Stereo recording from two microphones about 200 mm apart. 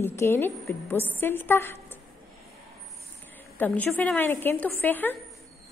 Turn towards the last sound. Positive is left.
turn(degrees=10)  # may be behind; listen again after turning